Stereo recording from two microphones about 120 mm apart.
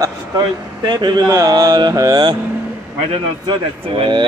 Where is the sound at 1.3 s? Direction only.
25° right (ahead or behind).